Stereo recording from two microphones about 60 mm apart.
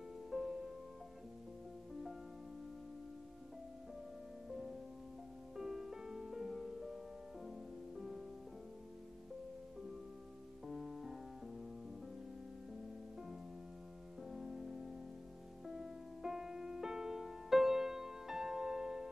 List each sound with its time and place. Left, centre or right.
0.3 s music: centre
4.5 s music: centre
10.7 s music: centre
14.2 s music: centre